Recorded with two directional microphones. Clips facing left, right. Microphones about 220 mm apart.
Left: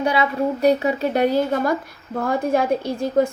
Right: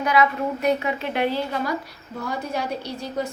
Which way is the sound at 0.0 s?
30° left (ahead or behind).